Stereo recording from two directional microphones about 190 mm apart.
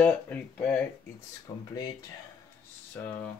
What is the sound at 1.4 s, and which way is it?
Speech, 20° left (ahead or behind).